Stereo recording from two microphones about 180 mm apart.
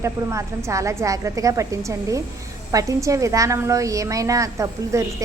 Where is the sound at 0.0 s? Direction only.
15° right (ahead or behind).